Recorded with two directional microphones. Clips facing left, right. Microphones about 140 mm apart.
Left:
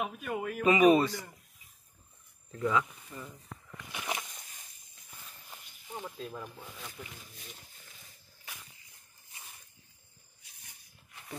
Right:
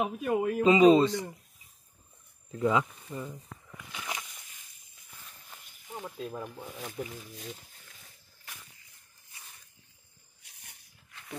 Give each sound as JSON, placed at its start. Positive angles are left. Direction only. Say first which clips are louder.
{"t": 0.0, "sound": "speech", "louder": "right 7 dB", "side_deg": -30}
{"t": 2.5, "sound": "speech", "louder": "right 3 dB", "side_deg": -20}
{"t": 3.9, "sound": "a sound", "louder": "left 2 dB", "side_deg": 20}
{"t": 5.5, "sound": "snake", "louder": "even", "side_deg": 0}
{"t": 6.3, "sound": "speech", "louder": "right 4 dB", "side_deg": -20}
{"t": 6.8, "sound": "speech", "louder": "right 8 dB", "side_deg": -40}